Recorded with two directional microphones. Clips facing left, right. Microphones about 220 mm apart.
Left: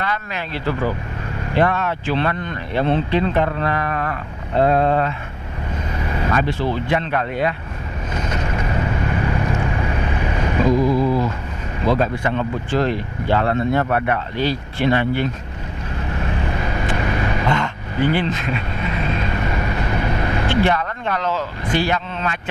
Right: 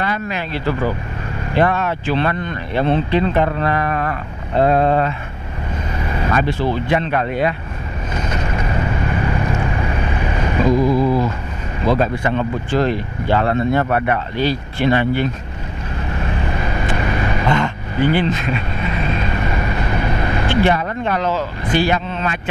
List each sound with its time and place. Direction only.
0.0 s speech: 10° right (ahead or behind)
6.2 s speech: 10° right (ahead or behind)
8.4 s vehicle: 20° right (ahead or behind)
10.8 s a sound: 30° right (ahead or behind)
11.9 s speech: 15° right (ahead or behind)
16.7 s vehicle: 15° right (ahead or behind)
20.8 s speech: 15° right (ahead or behind)